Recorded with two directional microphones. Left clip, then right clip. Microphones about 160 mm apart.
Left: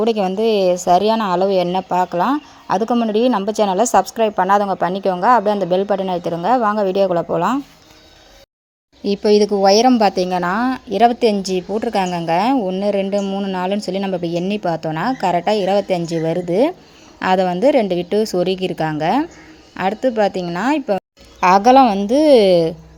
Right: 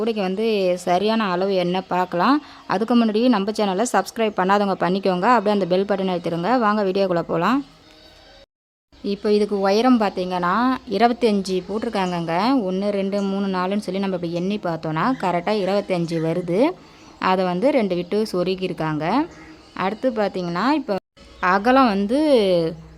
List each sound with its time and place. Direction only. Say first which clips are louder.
0.0 s a woman's voice: left 6 dB; 15° left (ahead or behind); by 7.6 s centre (ahead or behind)
9.0 s a woman's voice: left 6 dB; 20° left (ahead or behind)
10.6 s a woman's voice: left 6 dB; centre (ahead or behind)
12.5 s a woman's voice: left 3 dB; centre (ahead or behind)
12.8 s a woman's voice: left 5 dB; 10° left (ahead or behind)
13.2 s a woman's voice: left 2 dB; 5° right (ahead or behind)
13.6 s a woman's voice: left 4 dB; 10° left (ahead or behind)
21.8 s a woman's voice: left 4 dB; 5° left (ahead or behind)
22.1 s a woman's voice: left 8 dB; 20° left (ahead or behind)